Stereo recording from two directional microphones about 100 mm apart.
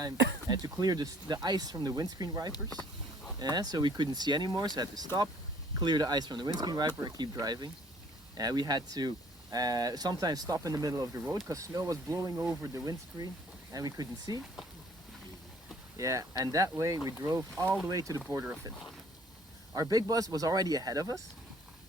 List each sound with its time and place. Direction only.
0.0 s speech: 40° right (ahead or behind)
16.0 s speech: 30° right (ahead or behind)
19.7 s speech: 40° right (ahead or behind)